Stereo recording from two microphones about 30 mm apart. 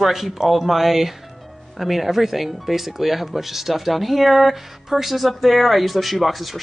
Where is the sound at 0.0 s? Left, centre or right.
Centre.